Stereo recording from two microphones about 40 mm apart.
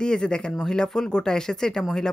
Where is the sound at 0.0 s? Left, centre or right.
Left.